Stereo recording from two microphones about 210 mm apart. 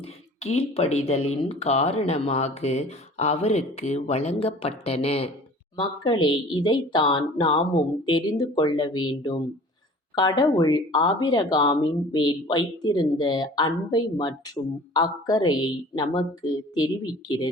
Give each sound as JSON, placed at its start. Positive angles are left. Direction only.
{"t": 0.0, "sound": "speech", "side_deg": 30}